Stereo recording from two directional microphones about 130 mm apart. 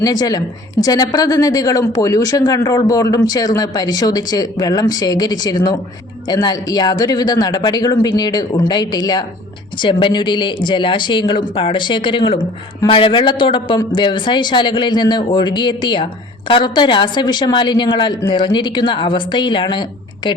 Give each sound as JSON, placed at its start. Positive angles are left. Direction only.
{"t": 0.0, "sound": "a man's voice", "side_deg": 30}